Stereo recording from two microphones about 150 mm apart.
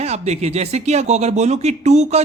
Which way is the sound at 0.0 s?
45° right (ahead or behind).